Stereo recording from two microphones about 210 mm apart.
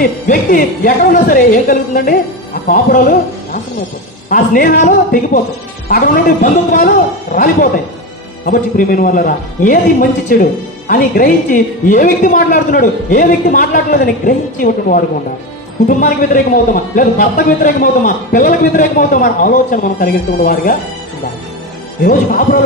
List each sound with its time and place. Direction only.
0.0 s a man's voice: 40° left (ahead or behind)
22.0 s a man's voice: 40° left (ahead or behind)